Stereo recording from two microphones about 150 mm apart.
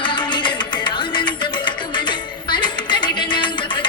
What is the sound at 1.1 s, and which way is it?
Music, 30° left (ahead or behind).